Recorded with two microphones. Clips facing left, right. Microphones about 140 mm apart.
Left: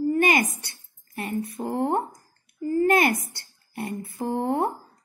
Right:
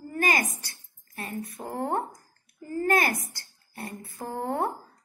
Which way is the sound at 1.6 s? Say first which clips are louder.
Left 4 dB; 20° left (ahead or behind).